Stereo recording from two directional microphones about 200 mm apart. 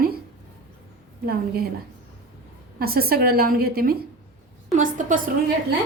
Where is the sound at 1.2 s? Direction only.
50° right (ahead or behind).